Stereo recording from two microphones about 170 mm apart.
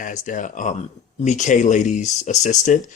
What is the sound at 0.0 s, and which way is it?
Speech, 50° left (ahead or behind).